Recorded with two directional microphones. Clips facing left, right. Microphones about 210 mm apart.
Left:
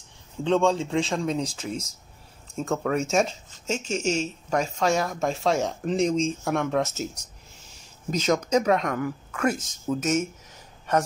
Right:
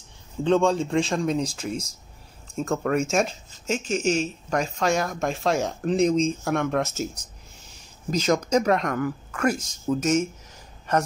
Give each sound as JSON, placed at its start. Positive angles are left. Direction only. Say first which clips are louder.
{"t": 0.4, "sound": "speech", "louder": "right 1 dB", "side_deg": 0}